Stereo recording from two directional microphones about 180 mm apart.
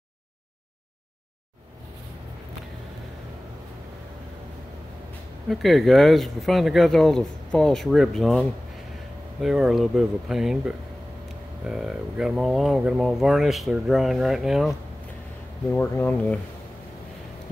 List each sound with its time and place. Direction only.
5.5 s speech: centre (ahead or behind)
15.7 s speech: 10° left (ahead or behind)